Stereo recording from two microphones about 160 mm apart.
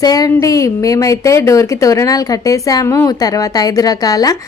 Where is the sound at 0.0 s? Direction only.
25° left (ahead or behind).